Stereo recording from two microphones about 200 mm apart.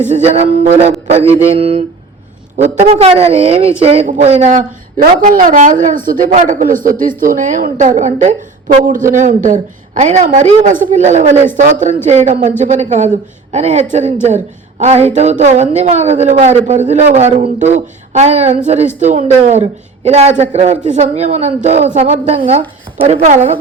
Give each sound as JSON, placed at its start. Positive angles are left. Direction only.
{"t": 0.1, "sound": "a woman's voice", "side_deg": -35}
{"t": 1.1, "sound": "mantra", "side_deg": -30}
{"t": 2.6, "sound": "a woman's voice", "side_deg": -30}
{"t": 5.2, "sound": "a woman's voice", "side_deg": -45}